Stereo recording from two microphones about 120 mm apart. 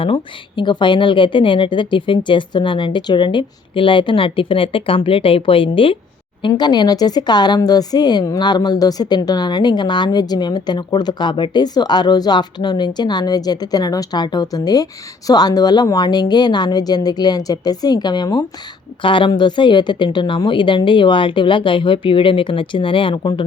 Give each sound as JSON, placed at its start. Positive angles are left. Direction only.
{"t": 0.0, "sound": "speech", "side_deg": 45}
{"t": 6.5, "sound": "speech", "side_deg": 35}